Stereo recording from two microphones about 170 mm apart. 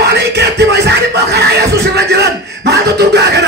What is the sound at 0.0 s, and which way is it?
Music, 75° right (ahead or behind).